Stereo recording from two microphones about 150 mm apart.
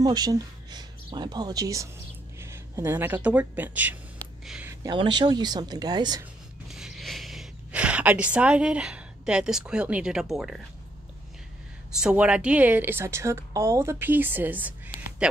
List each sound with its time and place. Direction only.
0.0 s speech: 25° right (ahead or behind)
4.6 s speech: 30° right (ahead or behind)
6.7 s a sound: 5° right (ahead or behind)
12.0 s a woman's voice: 5° right (ahead or behind)